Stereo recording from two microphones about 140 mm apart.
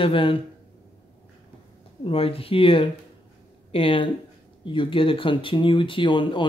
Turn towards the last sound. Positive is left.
turn(degrees=35)  # may be behind; listen again after turning